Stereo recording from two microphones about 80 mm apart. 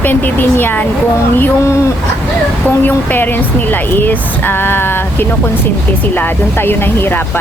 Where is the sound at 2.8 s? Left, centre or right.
Left.